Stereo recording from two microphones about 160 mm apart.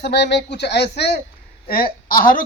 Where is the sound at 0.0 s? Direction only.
90° left.